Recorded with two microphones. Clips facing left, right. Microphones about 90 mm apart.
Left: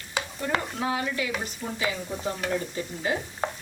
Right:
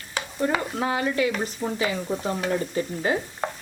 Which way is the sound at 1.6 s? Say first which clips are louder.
Right 6 dB; 70° right (ahead or behind).